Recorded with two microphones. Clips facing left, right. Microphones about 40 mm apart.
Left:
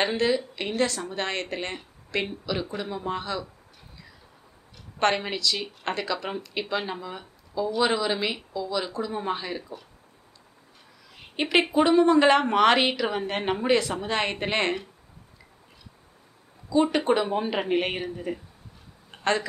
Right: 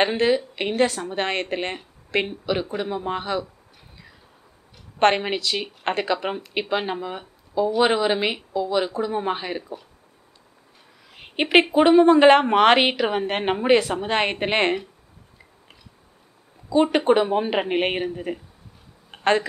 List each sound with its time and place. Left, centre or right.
0.0 s speech: right
4.9 s speech: right
11.1 s a sound: right
11.7 s speech: right
16.6 s speech: right
19.0 s a sound: right